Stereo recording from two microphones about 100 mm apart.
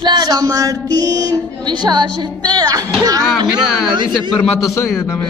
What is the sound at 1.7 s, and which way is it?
Speech, 45° right (ahead or behind).